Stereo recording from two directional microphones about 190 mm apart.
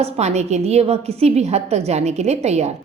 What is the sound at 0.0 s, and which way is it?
A woman's voice, 35° right (ahead or behind).